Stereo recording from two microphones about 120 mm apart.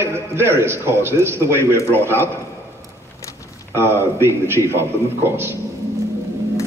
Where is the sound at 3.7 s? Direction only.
20° right (ahead or behind).